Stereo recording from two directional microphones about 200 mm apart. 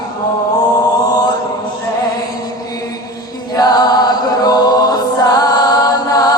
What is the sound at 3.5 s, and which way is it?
Music, 20° left (ahead or behind).